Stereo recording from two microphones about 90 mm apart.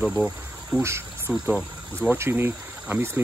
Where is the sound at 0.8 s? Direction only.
30° right (ahead or behind).